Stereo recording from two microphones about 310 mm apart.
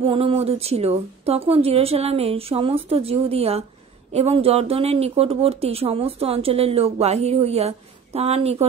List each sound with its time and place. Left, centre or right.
0.0 s speech: centre